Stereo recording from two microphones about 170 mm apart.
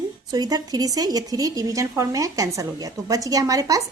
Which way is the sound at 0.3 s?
25° right (ahead or behind).